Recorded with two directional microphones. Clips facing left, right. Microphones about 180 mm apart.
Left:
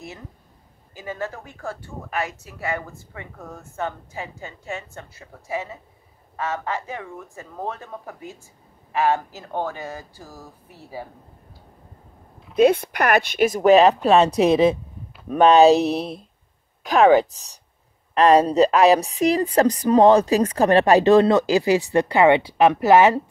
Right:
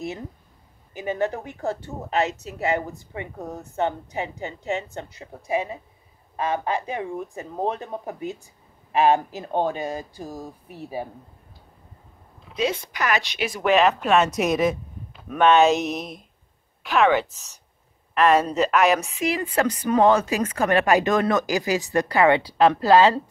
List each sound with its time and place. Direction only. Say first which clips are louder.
0.9 s speech: right 5 dB; 20° right (ahead or behind)
12.5 s speech: left 9 dB; 60° left (ahead or behind); by 13.9 s 35° left (ahead or behind)
14.0 s a sound: left 4 dB; 30° left (ahead or behind)